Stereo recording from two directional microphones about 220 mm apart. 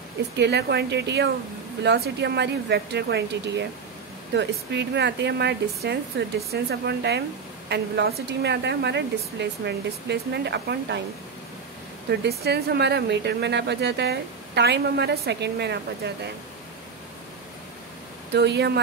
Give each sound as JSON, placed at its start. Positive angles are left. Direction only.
{"t": 0.4, "sound": "speech", "side_deg": -50}
{"t": 12.1, "sound": "speech", "side_deg": -50}
{"t": 18.3, "sound": "speech", "side_deg": -50}